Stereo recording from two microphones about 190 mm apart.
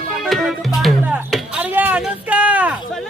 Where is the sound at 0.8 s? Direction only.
Centre (ahead or behind).